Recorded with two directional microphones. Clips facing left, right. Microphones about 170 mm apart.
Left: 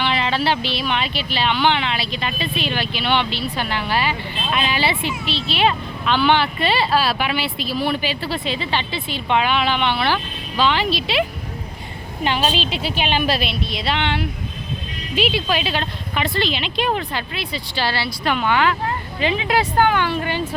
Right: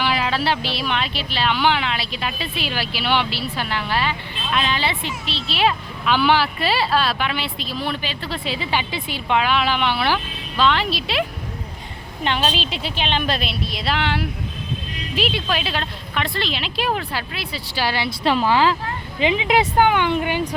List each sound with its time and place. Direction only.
0.0 s a woman's voice: 5° right (ahead or behind)
8.4 s a woman's voice: 10° right (ahead or behind)
18.2 s speech: 30° right (ahead or behind)
19.2 s speech: 15° right (ahead or behind)